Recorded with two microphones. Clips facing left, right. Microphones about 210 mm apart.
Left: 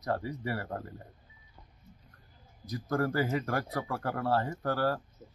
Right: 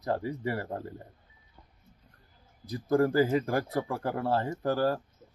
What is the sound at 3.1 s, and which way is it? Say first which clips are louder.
Speech: right 5 dB; 30° right (ahead or behind).